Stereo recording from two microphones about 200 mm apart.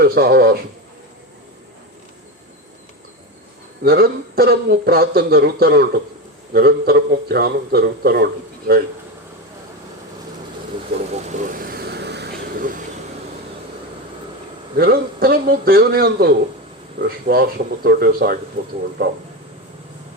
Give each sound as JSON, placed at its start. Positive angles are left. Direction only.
{"t": 0.0, "sound": "a man's voice", "side_deg": -50}
{"t": 3.8, "sound": "a man's voice", "side_deg": -50}
{"t": 11.1, "sound": "vehicle", "side_deg": -35}
{"t": 14.8, "sound": "a man's voice", "side_deg": -50}